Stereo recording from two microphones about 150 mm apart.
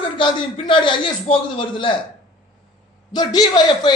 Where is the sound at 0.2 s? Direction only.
35° left (ahead or behind).